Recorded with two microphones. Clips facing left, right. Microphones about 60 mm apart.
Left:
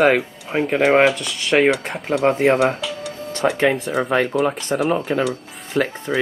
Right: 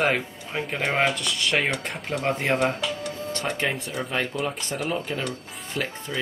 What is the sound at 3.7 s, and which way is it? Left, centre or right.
Speech, left.